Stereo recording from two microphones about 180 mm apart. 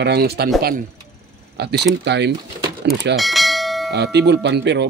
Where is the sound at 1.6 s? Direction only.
65° right (ahead or behind).